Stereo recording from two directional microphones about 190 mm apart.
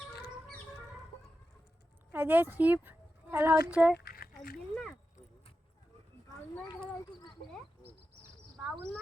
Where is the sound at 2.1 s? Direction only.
10° right (ahead or behind).